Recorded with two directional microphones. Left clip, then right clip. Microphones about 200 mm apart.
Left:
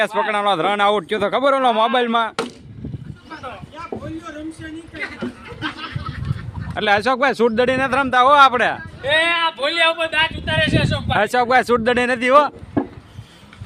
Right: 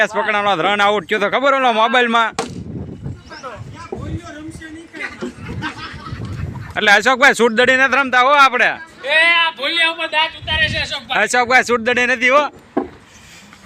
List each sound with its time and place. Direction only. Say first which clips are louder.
0.0 s a man's voice: right 2 dB; 5° left (ahead or behind)
6.7 s a man's voice: right 5 dB; centre (ahead or behind); by 8.8 s 20° left (ahead or behind)
9.0 s speech: right 4 dB; 40° left (ahead or behind)
11.1 s speech: right 2 dB; 15° left (ahead or behind)